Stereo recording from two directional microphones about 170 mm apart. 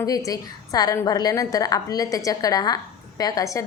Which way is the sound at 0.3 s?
20° left (ahead or behind).